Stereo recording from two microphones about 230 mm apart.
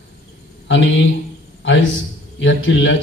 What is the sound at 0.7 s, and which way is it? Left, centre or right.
A man's voice, left.